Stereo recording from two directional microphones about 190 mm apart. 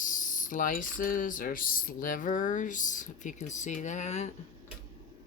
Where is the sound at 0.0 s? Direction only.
45° left (ahead or behind).